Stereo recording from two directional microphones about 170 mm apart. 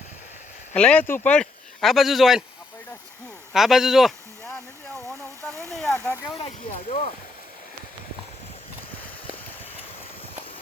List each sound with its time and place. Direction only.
0.7 s speech: 5° left (ahead or behind)
3.5 s speech: centre (ahead or behind)
6.0 s speech: 20° left (ahead or behind)
6.7 s speech: 40° left (ahead or behind)